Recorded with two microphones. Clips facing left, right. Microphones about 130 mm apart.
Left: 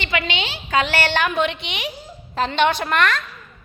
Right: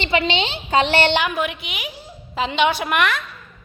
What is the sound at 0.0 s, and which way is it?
A woman's voice, 30° right (ahead or behind).